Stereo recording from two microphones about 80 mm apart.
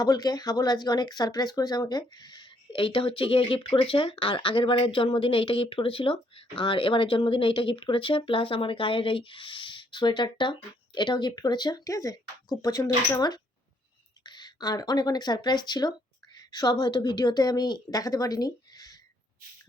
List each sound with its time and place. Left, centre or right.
0.0 s a woman's voice: left